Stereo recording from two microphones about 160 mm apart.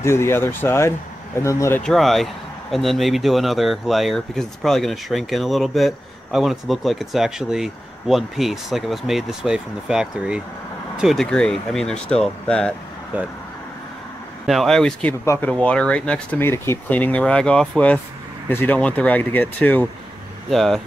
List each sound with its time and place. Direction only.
0.0 s speech: 15° left (ahead or behind)
1.8 s speech: centre (ahead or behind)
14.4 s speech: centre (ahead or behind)